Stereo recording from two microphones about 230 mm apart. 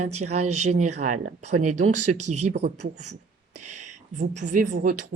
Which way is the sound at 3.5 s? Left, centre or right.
Right.